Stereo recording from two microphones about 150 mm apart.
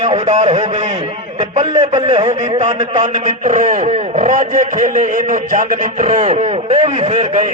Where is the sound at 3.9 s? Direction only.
45° right (ahead or behind).